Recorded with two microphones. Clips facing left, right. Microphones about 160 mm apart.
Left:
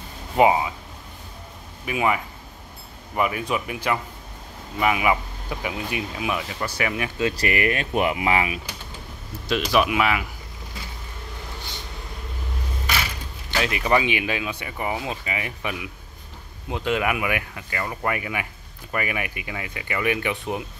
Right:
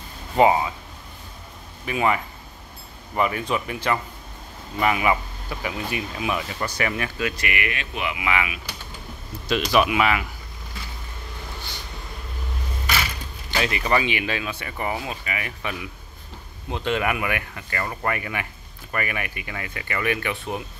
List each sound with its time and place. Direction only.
0.4 s speech: 10° left (ahead or behind)
1.9 s speech: 10° left (ahead or behind)
7.2 s speech: 30° left (ahead or behind)
9.5 s speech: centre (ahead or behind)
13.7 s speech: 10° left (ahead or behind)